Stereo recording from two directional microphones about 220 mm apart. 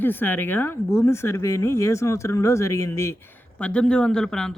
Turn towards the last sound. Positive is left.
turn(degrees=5)  # may be behind; listen again after turning